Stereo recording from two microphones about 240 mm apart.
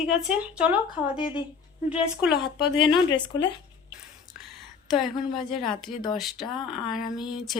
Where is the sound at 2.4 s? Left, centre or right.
Left.